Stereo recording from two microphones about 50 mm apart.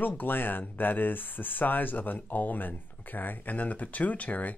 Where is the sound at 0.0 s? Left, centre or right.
Left.